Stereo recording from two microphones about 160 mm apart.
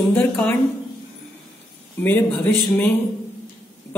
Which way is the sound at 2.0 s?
10° left (ahead or behind).